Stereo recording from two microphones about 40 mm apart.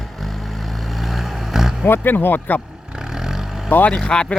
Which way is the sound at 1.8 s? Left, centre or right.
Left.